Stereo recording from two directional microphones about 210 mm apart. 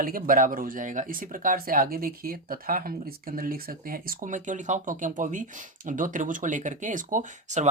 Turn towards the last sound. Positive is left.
turn(degrees=-35)  # may be behind; listen again after turning